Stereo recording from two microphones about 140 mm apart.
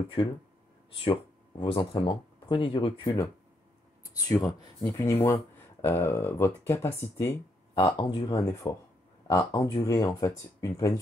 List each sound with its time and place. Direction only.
0.2 s speech: 40° left (ahead or behind)
1.6 s speech: 35° left (ahead or behind)
4.3 s speech: 25° left (ahead or behind)
7.8 s speech: 30° left (ahead or behind)